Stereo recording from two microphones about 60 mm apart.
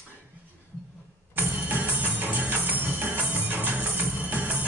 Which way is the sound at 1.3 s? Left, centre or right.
Right.